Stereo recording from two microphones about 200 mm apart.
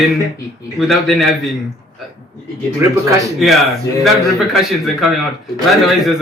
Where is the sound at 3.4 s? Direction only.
Centre (ahead or behind).